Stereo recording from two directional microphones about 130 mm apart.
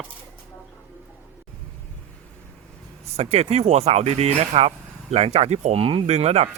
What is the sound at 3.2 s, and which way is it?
Speech, 55° right (ahead or behind).